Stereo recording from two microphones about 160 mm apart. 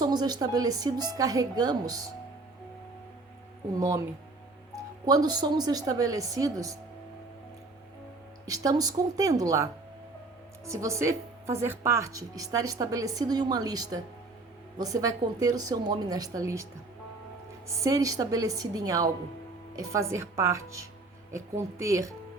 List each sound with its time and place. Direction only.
0.0 s speech: 25° right (ahead or behind)
3.8 s speech: 20° right (ahead or behind)
8.4 s speech: 20° right (ahead or behind)
10.7 s speech: 20° right (ahead or behind)
17.8 s speech: 20° right (ahead or behind)